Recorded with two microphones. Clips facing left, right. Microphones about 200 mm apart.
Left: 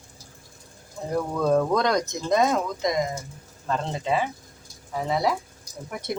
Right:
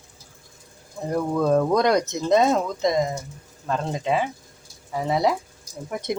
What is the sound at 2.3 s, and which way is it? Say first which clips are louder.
Speech: right 3 dB; 25° right (ahead or behind).